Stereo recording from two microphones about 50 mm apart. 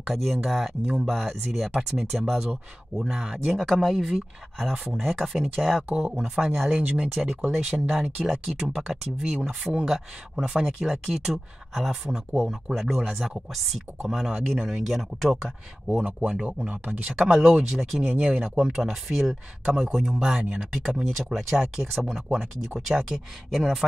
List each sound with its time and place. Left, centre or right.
0.0 s speech: centre
1.7 s speech: centre
2.0 s speech: centre
5.9 s speech: centre
6.8 s speech: right
7.2 s speech: centre
16.0 s speech: right
17.1 s speech: centre
18.1 s speech: right
18.8 s speech: centre